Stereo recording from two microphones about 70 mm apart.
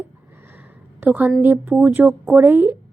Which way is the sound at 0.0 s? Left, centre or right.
Right.